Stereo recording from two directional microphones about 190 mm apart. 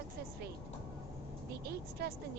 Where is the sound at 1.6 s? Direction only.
55° right (ahead or behind).